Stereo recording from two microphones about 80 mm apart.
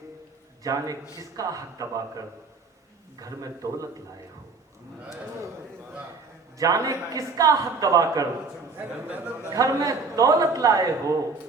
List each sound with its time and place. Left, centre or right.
0.6 s a man's voice: right
6.6 s a man's voice: right
9.0 s speech: centre
9.5 s a man's voice: right